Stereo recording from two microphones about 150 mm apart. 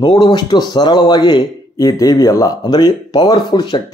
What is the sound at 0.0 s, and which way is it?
A man's voice, 30° left (ahead or behind).